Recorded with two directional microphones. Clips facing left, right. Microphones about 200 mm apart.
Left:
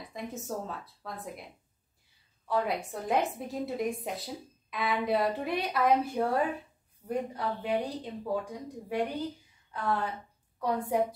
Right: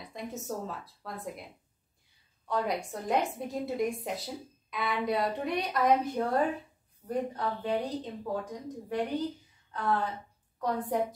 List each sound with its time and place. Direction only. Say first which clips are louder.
0.0 s a woman's voice: even; centre (ahead or behind)
2.4 s a woman's voice: left 1 dB; 5° left (ahead or behind)
10.6 s a woman's voice: left 1 dB; 10° left (ahead or behind)